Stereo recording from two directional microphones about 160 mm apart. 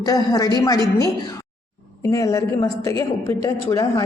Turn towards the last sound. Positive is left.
turn(degrees=20)  # may be behind; listen again after turning